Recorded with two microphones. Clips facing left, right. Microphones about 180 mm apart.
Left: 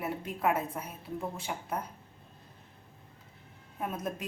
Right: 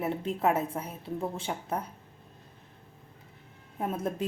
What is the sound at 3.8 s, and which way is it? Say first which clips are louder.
Speech: right 4 dB; 30° right (ahead or behind).